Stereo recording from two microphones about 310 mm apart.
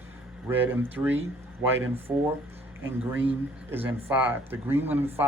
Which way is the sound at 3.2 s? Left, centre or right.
Centre.